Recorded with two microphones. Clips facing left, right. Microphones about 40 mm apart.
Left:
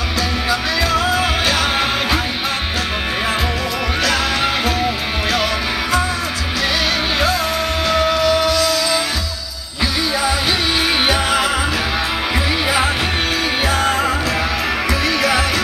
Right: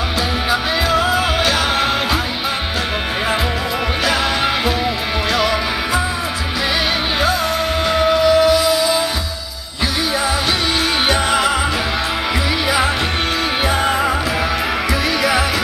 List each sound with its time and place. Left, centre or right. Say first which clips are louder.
0.8 s music: right 1 dB; centre
1.4 s music: right 1 dB; centre
4.0 s music: even; centre
7.9 s music: right 2 dB; centre
11.1 s music: right 1 dB; centre
12.6 s music: right 1 dB; centre
13.7 s music: even; centre